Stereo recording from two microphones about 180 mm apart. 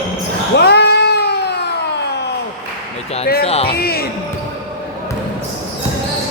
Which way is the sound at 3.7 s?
60° left (ahead or behind).